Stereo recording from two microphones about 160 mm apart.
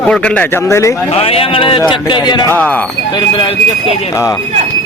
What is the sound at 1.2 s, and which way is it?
Speech, 35° left (ahead or behind).